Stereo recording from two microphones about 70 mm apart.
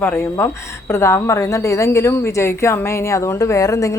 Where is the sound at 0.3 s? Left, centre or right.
Left.